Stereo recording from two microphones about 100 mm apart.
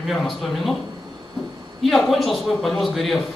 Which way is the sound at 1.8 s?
Centre (ahead or behind).